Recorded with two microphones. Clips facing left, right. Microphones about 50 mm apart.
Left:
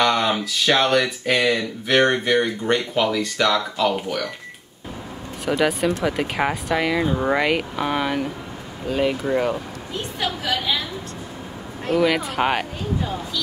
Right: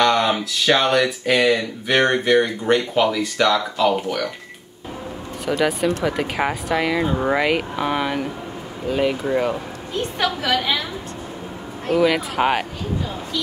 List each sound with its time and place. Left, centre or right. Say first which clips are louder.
0.0 s speech: right 2 dB; centre
5.6 s speech: right 1 dB; centre
10.2 s a woman's voice: right 3 dB; right
11.9 s speech: right 1 dB; centre